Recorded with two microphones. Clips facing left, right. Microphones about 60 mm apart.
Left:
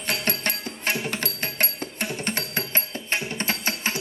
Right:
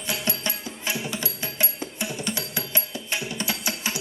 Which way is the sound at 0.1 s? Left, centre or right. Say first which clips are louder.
Left 2 dB; left.